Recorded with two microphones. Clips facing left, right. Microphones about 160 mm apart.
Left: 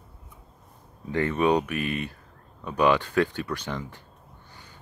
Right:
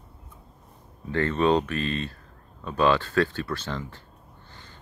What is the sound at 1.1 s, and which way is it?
Speech, 15° left (ahead or behind).